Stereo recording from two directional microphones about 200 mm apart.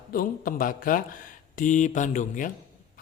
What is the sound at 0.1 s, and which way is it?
Speech, 45° left (ahead or behind).